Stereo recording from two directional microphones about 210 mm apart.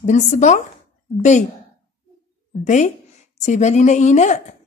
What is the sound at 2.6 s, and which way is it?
A woman's voice, 35° left (ahead or behind).